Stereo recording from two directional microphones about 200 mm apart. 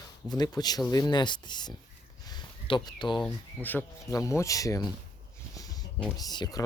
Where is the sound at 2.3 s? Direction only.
20° left (ahead or behind).